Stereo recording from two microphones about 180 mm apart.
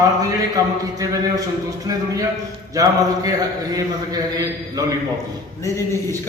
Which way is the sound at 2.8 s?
20° right (ahead or behind).